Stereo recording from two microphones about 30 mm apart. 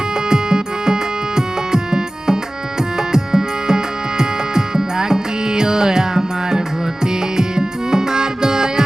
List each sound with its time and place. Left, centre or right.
0.3 s music: right